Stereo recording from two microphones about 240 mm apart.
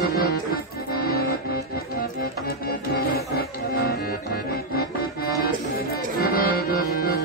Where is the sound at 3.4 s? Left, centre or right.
Left.